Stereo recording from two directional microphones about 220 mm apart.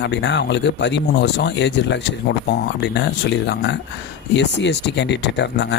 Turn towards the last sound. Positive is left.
turn(degrees=50)  # may be behind; listen again after turning